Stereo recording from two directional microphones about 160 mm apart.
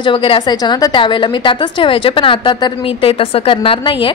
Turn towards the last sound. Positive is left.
turn(degrees=30)  # may be behind; listen again after turning